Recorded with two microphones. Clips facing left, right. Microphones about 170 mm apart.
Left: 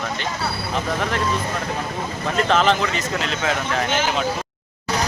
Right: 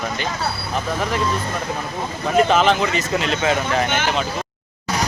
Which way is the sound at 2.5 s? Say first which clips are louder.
Right 2 dB; 5° right (ahead or behind).